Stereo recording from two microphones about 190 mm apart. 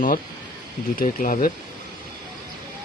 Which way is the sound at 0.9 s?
45° left (ahead or behind).